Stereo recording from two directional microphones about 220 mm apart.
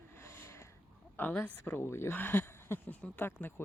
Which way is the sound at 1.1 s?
10° left (ahead or behind).